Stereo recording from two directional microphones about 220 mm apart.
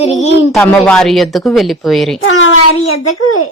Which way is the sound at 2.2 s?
70° left (ahead or behind).